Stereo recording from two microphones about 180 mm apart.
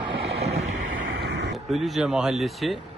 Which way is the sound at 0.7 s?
75° right (ahead or behind).